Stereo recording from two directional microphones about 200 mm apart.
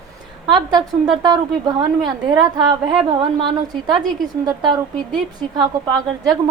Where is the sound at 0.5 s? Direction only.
20° right (ahead or behind).